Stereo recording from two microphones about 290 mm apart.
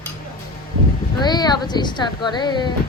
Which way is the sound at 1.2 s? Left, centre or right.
Centre.